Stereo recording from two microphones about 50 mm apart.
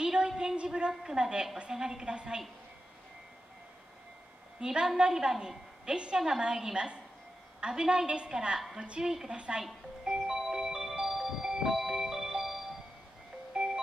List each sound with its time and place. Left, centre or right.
0.0 s a sound: centre
0.4 s a woman's voice: centre
4.6 s a woman's voice: centre
10.0 s music: centre